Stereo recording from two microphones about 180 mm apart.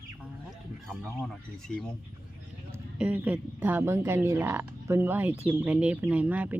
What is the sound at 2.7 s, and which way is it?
Speech, 10° right (ahead or behind).